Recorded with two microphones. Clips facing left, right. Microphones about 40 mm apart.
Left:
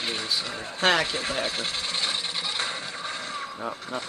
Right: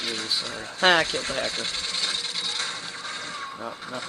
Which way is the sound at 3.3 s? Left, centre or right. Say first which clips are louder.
Left 1 dB; centre.